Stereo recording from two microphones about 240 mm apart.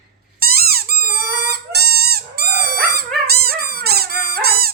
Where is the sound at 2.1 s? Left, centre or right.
Right.